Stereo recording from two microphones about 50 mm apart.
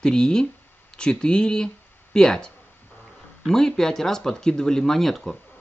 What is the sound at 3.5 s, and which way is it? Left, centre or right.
A man's voice, centre.